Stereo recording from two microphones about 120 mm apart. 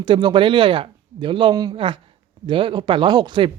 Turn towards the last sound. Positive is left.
turn(degrees=-40)  # may be behind; listen again after turning